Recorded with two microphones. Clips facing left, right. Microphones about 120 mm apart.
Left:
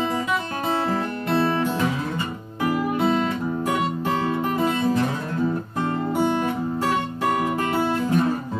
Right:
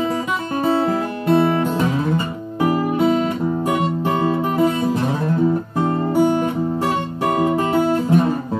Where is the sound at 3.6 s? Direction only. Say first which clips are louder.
Right 4 dB; 20° right (ahead or behind).